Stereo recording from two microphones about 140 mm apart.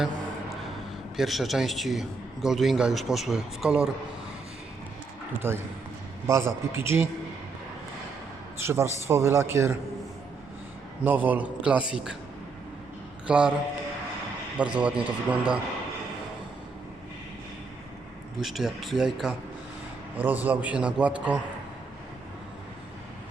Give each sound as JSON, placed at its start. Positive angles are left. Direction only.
{"t": 1.1, "sound": "a man's voice", "side_deg": 0}
{"t": 5.4, "sound": "a man's voice", "side_deg": -15}
{"t": 8.5, "sound": "a man's voice", "side_deg": -20}
{"t": 11.0, "sound": "a man's voice", "side_deg": -10}
{"t": 13.2, "sound": "a man's voice", "side_deg": -5}
{"t": 14.6, "sound": "a man's voice", "side_deg": -10}
{"t": 18.3, "sound": "a man's voice", "side_deg": -5}